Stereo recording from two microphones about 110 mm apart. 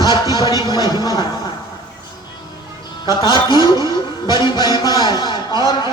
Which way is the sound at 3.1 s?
45° left (ahead or behind).